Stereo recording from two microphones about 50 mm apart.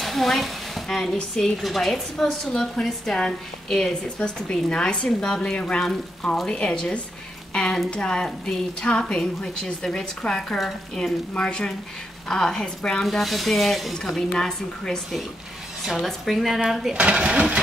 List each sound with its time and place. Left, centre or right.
0.0 s a sound: centre
1.3 s a woman's voice: centre
13.0 s a woman's voice: centre
15.8 s speech: centre
16.9 s speech: right